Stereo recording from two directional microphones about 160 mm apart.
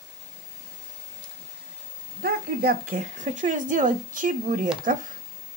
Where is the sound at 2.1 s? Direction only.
75° right (ahead or behind); by 4.7 s 55° right (ahead or behind).